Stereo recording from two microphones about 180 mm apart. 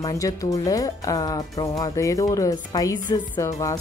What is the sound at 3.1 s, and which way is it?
Music, 20° left (ahead or behind).